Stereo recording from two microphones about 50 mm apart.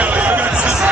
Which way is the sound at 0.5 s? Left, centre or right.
Right.